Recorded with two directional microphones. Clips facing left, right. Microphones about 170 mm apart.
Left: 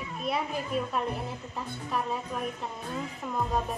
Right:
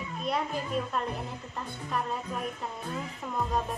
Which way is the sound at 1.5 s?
5° left (ahead or behind).